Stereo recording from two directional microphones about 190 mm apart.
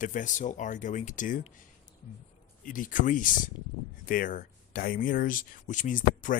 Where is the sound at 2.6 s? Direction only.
45° left (ahead or behind).